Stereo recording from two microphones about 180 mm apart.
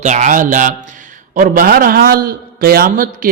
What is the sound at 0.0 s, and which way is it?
A man's voice, 40° right (ahead or behind).